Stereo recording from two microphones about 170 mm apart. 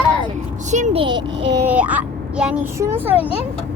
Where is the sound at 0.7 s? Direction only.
40° right (ahead or behind).